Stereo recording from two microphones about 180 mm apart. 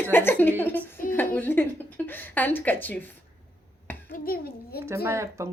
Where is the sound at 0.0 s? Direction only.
10° left (ahead or behind).